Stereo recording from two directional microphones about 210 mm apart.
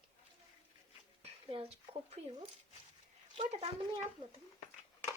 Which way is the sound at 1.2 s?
25° right (ahead or behind).